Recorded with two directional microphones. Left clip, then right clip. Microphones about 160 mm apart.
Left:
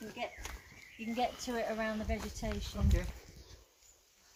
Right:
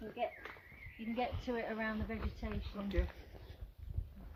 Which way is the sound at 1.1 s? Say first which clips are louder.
Left 4 dB; 90° left.